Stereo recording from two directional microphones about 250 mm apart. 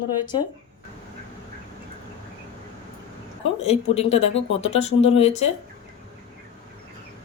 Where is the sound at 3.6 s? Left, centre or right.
Left.